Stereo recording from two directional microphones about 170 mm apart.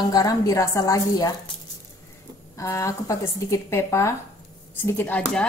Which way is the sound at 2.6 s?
20° left (ahead or behind).